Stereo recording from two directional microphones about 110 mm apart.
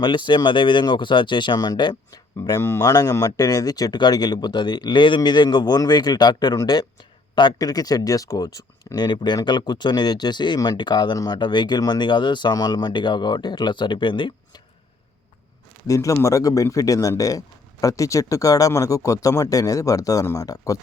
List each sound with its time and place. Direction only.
0.0 s speech: 45° left (ahead or behind)
2.6 s speech: 20° left (ahead or behind)
2.8 s speech: 35° left (ahead or behind)
15.9 s speech: 30° left (ahead or behind)